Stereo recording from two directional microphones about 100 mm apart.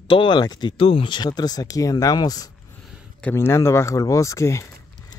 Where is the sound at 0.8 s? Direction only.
65° left (ahead or behind); by 2.4 s 40° left (ahead or behind).